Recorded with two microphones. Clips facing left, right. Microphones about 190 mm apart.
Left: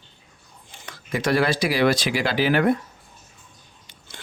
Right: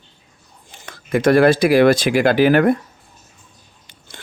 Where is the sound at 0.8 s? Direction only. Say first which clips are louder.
Right 9 dB; 50° right (ahead or behind).